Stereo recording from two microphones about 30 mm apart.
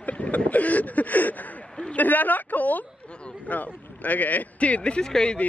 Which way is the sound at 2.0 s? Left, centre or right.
Left.